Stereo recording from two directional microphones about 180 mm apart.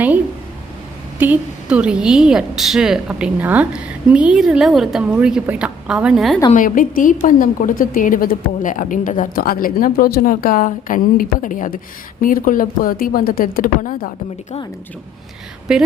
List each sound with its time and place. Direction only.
1.2 s a woman's voice: 10° right (ahead or behind)
6.5 s a woman's voice: 50° left (ahead or behind)
15.7 s a woman's voice: 5° right (ahead or behind)